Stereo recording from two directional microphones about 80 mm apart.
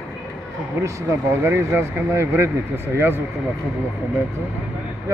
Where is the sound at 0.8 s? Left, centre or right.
Right.